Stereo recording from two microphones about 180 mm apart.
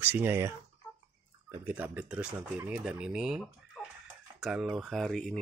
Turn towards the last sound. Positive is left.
turn(degrees=0)  # may be behind; listen again after turning